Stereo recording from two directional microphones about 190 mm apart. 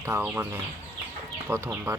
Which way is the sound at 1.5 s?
15° right (ahead or behind).